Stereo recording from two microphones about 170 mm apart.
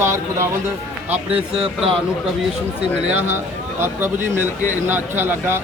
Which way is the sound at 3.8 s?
10° right (ahead or behind).